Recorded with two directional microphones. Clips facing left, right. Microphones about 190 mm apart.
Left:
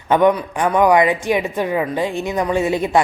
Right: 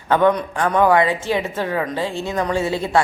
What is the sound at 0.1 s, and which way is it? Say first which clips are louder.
A woman's voice: left 2 dB; 15° left (ahead or behind).